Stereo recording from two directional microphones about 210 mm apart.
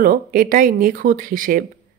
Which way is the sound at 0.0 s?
45° right (ahead or behind).